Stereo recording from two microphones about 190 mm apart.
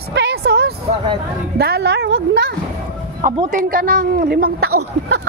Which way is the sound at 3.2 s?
45° right (ahead or behind).